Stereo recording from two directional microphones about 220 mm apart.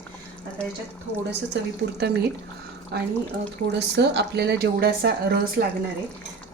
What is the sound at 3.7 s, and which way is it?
A woman's voice, 50° right (ahead or behind).